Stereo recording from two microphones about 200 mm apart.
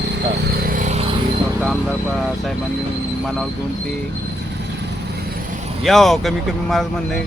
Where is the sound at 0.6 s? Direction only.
40° right (ahead or behind).